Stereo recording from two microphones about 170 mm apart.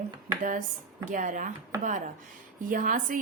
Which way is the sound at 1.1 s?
50° right (ahead or behind).